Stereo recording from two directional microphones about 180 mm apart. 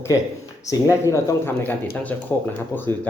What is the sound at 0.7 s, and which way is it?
Speech, 15° left (ahead or behind).